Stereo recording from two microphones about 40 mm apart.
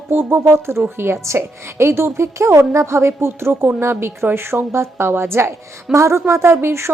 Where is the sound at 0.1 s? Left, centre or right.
Right.